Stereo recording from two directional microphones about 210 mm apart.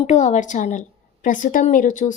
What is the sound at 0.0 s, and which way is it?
A woman's voice, 35° left (ahead or behind).